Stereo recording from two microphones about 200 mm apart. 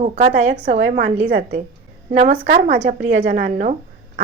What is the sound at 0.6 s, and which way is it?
A woman's voice, 35° right (ahead or behind).